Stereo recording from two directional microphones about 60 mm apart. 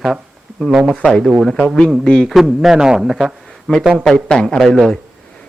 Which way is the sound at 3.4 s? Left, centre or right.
Centre.